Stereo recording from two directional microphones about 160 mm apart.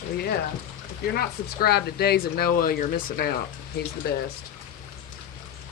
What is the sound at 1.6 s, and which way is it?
Speech, 80° left.